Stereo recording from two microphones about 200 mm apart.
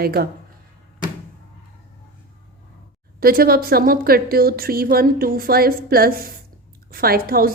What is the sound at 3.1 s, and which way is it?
A woman's voice, 45° right (ahead or behind).